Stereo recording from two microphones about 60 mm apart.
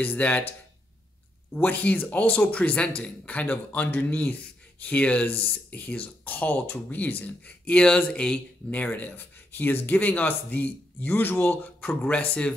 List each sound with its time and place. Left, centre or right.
0.0 s a man's voice: left
8.6 s a man's voice: left